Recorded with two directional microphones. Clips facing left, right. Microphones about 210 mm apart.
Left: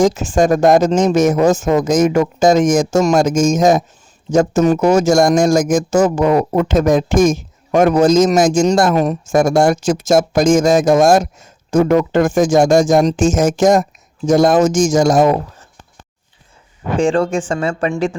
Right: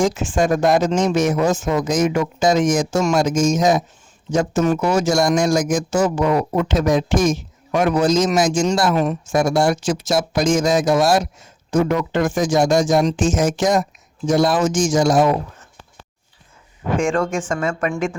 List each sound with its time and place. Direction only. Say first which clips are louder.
0.0 s speech: left 5 dB; 40° left (ahead or behind)
17.0 s a woman's voice: left 6 dB; 35° left (ahead or behind)